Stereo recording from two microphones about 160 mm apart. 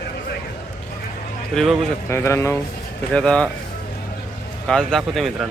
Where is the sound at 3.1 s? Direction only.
5° left (ahead or behind).